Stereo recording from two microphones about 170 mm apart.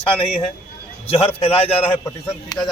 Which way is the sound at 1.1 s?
35° left (ahead or behind).